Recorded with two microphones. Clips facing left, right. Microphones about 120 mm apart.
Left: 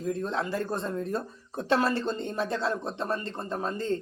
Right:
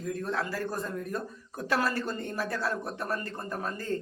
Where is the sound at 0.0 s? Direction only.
20° left (ahead or behind).